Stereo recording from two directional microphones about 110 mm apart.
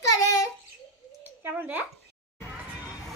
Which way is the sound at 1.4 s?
15° right (ahead or behind).